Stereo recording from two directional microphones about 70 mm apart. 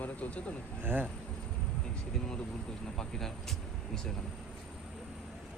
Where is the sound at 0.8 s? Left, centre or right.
Right.